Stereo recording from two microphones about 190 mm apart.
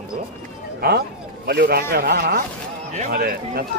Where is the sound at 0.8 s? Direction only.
55° right (ahead or behind).